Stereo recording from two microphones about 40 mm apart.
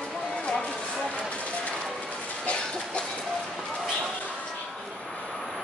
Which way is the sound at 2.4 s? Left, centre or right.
Left.